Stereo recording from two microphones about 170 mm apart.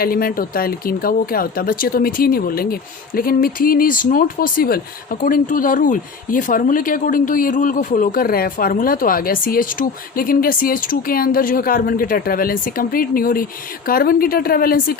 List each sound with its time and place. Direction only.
0.0 s speech: 60° left (ahead or behind)